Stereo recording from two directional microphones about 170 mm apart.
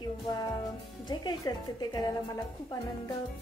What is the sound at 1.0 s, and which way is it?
A woman's voice, 25° left (ahead or behind).